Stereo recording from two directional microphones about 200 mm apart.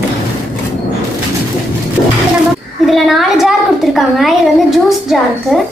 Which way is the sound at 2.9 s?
Centre (ahead or behind).